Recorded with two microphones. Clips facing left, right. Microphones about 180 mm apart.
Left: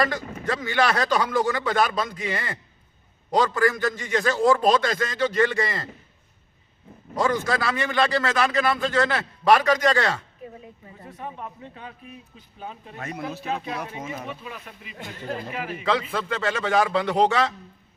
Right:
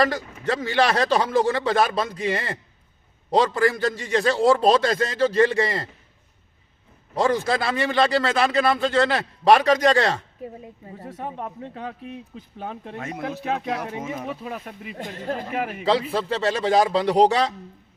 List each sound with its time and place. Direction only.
0.5 s a man's voice: 30° right (ahead or behind)
7.2 s a man's voice: 30° right (ahead or behind)
11.4 s speech: 70° right (ahead or behind)
14.4 s a man's voice: 40° right (ahead or behind)